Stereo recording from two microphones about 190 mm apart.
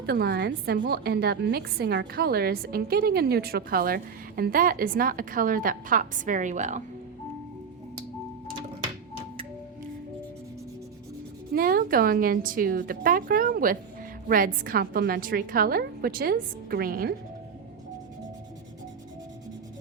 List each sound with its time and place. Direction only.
0.0 s a woman's voice: 60° right (ahead or behind); by 6.8 s 40° right (ahead or behind)
11.5 s a woman's voice: 50° right (ahead or behind)